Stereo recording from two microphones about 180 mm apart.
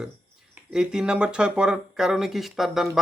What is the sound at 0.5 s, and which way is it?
Speech, 5° right (ahead or behind).